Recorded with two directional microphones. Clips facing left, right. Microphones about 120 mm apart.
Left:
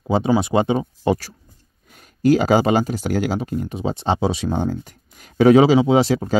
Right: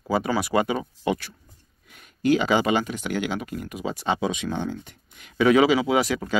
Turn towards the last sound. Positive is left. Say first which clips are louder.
# left 6 dB
turn(degrees=30)  # may be behind; listen again after turning